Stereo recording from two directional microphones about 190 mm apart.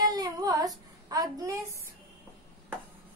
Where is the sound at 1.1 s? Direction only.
20° right (ahead or behind).